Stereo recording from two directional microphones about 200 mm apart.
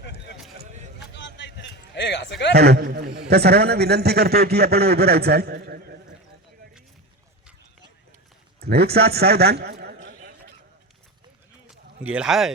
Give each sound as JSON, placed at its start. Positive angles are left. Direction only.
{"t": 0.0, "sound": "a sound", "side_deg": 60}
{"t": 2.5, "sound": "a man's voice", "side_deg": -55}
{"t": 8.6, "sound": "a man's voice", "side_deg": -55}
{"t": 11.7, "sound": "speech", "side_deg": -5}